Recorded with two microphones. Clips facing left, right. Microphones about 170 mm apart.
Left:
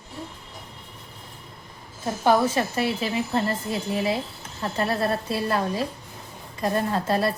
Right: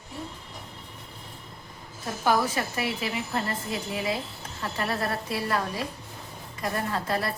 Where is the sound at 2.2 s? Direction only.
30° left (ahead or behind).